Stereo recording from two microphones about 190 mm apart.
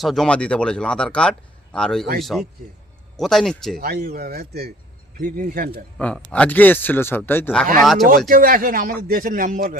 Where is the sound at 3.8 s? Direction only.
55° right (ahead or behind).